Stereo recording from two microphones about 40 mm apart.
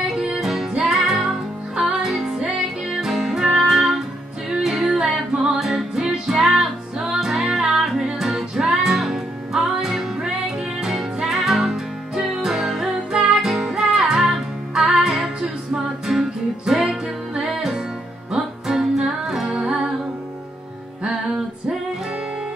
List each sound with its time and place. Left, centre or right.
0.2 s music: centre
15.7 s music: centre
21.0 s music: centre